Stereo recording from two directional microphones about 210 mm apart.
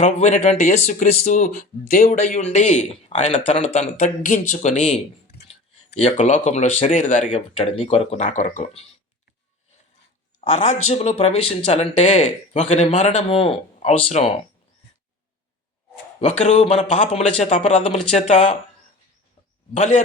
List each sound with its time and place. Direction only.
0.0 s speech: 35° left (ahead or behind)
10.8 s speech: 30° left (ahead or behind)
16.4 s speech: 30° left (ahead or behind)
19.7 s speech: 35° left (ahead or behind)